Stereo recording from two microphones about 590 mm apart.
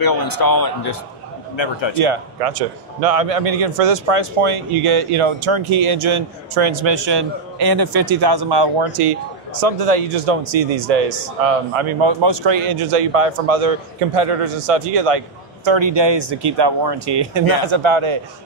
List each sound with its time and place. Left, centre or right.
0.0 s a man's voice: left
1.6 s a man's voice: left
2.0 s a man's voice: right
9.6 s a man's voice: right